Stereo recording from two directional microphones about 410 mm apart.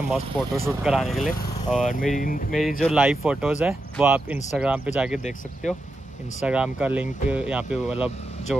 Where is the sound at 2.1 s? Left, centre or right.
Centre.